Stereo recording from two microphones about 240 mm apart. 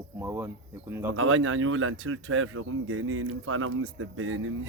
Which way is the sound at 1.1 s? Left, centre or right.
Right.